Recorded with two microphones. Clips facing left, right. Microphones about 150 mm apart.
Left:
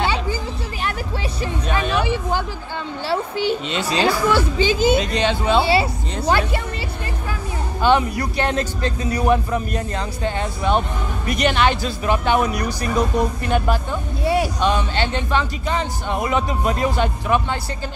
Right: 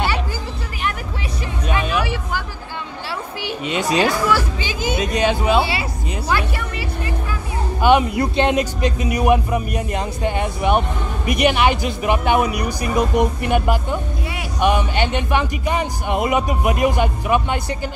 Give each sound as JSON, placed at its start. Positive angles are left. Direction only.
{"t": 1.7, "sound": "vehicle", "side_deg": 30}
{"t": 3.1, "sound": "a sound", "side_deg": 30}
{"t": 3.6, "sound": "speech", "side_deg": -15}
{"t": 4.0, "sound": "speech", "side_deg": 25}
{"t": 5.0, "sound": "speech", "side_deg": -15}
{"t": 5.6, "sound": "speech", "side_deg": 30}
{"t": 7.8, "sound": "speech", "side_deg": -20}
{"t": 14.2, "sound": "music", "side_deg": 35}
{"t": 14.6, "sound": "speech", "side_deg": -15}